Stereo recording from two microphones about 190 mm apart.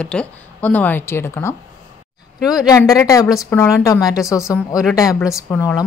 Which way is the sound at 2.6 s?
20° left (ahead or behind).